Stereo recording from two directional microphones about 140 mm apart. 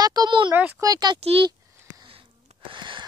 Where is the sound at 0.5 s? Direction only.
15° right (ahead or behind).